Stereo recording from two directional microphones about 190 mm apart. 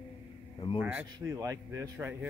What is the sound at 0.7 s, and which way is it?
Speech, 10° right (ahead or behind).